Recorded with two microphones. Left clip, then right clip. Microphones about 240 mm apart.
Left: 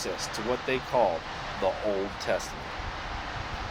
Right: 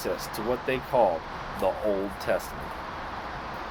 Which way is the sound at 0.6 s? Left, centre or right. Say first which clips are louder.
Right 2 dB; right.